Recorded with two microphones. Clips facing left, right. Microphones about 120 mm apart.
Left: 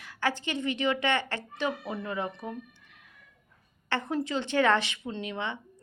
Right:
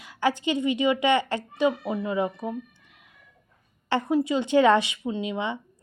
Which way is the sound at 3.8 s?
15° right (ahead or behind).